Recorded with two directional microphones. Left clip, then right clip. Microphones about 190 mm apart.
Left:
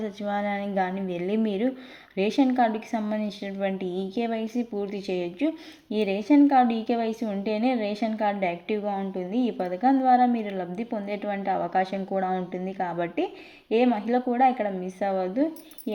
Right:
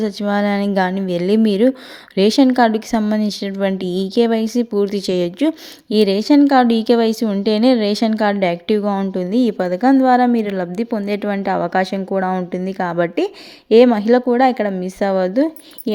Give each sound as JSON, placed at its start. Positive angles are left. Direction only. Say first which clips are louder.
{"t": 0.0, "sound": "speech", "louder": "right 10 dB", "side_deg": -30}